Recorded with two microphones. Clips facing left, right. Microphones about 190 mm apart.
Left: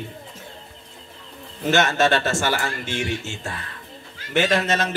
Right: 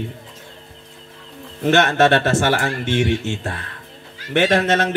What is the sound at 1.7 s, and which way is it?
Speech, 60° right (ahead or behind).